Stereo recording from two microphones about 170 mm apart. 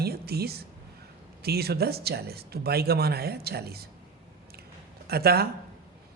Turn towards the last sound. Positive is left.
turn(degrees=-65)  # may be behind; listen again after turning